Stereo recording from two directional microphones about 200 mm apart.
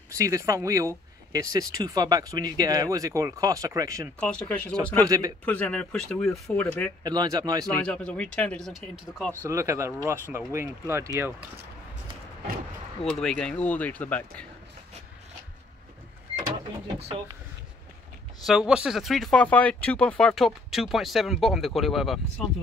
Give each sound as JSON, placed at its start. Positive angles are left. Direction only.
{"t": 0.1, "sound": "speech", "side_deg": -15}
{"t": 4.2, "sound": "speech", "side_deg": 5}
{"t": 5.0, "sound": "speech", "side_deg": -15}
{"t": 5.4, "sound": "speech", "side_deg": 5}
{"t": 7.0, "sound": "speech", "side_deg": -20}
{"t": 7.6, "sound": "speech", "side_deg": 5}
{"t": 9.3, "sound": "speech", "side_deg": -15}
{"t": 13.2, "sound": "speech", "side_deg": 5}
{"t": 16.8, "sound": "speech", "side_deg": -20}
{"t": 18.4, "sound": "speech", "side_deg": 0}